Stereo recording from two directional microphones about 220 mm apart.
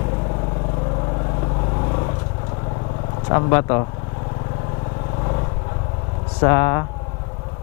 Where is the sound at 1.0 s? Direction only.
25° left (ahead or behind).